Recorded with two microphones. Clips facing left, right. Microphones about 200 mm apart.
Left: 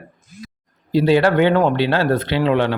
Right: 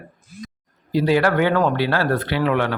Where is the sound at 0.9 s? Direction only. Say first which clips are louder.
Left 3 dB; 25° left (ahead or behind).